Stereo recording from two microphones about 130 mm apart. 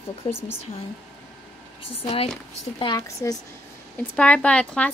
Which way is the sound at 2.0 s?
55° left (ahead or behind).